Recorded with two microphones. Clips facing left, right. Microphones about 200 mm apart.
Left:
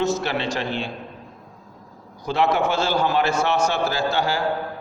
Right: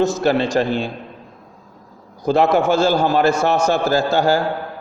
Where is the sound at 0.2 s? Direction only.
45° right (ahead or behind).